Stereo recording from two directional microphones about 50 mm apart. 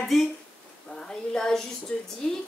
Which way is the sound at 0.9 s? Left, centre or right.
Centre.